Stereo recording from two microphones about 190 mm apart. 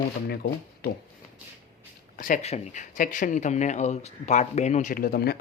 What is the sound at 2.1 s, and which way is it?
Speech, 45° left (ahead or behind).